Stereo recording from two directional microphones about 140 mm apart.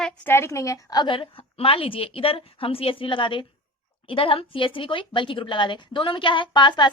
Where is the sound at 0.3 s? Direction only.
20° left (ahead or behind).